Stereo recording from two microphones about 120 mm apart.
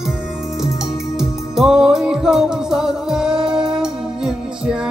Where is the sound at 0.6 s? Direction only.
5° right (ahead or behind).